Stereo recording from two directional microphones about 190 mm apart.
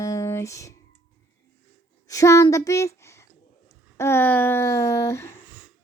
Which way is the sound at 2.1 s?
15° left (ahead or behind).